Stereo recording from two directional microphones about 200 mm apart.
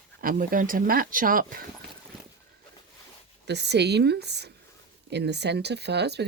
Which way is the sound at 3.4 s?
60° right (ahead or behind).